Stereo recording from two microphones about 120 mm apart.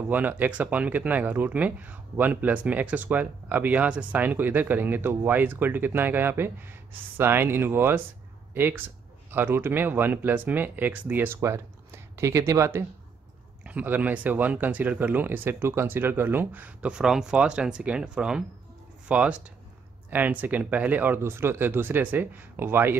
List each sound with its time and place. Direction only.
0.1 s speech: 15° right (ahead or behind)
13.7 s speech: 15° right (ahead or behind)